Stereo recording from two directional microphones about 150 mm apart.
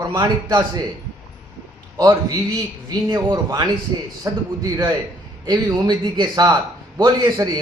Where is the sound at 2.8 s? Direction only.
25° right (ahead or behind).